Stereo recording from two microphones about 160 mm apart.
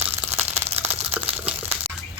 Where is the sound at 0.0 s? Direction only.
15° right (ahead or behind).